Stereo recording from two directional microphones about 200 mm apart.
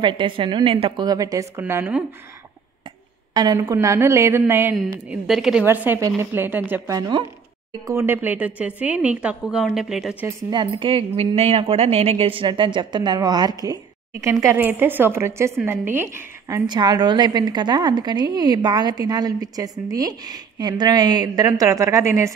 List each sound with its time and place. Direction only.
0.0 s a woman's voice: 25° right (ahead or behind)
3.3 s a woman's voice: 20° right (ahead or behind); by 10.1 s centre (ahead or behind)
10.2 s a woman's voice: 25° right (ahead or behind)